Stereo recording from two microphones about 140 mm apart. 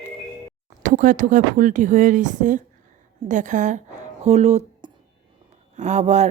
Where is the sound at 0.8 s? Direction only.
70° right (ahead or behind); by 4.6 s 50° right (ahead or behind).